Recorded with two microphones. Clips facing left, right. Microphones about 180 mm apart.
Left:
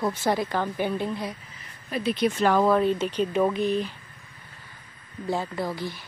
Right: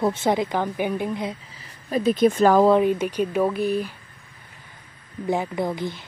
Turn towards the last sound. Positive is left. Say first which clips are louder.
# right 4 dB
turn(degrees=-20)  # may be behind; listen again after turning